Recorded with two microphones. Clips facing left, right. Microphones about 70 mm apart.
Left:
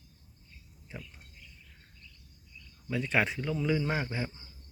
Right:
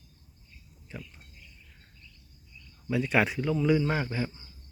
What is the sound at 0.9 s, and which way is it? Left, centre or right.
Cricket, left.